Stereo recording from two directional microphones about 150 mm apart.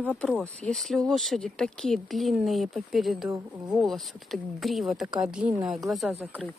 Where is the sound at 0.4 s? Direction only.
5° left (ahead or behind).